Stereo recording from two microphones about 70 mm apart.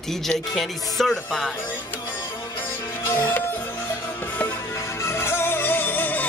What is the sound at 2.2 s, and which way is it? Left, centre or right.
Music, left.